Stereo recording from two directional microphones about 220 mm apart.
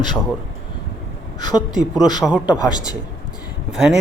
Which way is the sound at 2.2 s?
Centre (ahead or behind).